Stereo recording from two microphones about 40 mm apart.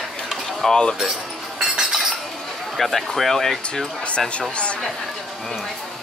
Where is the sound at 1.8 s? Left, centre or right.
Centre.